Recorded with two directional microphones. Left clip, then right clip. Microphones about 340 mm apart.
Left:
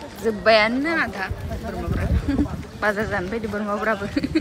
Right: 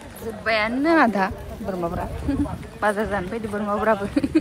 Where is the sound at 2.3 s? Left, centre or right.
Centre.